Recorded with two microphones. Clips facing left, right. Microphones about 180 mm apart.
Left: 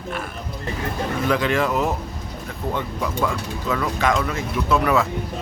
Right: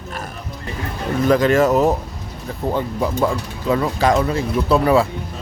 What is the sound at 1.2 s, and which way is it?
Speech, 40° right (ahead or behind).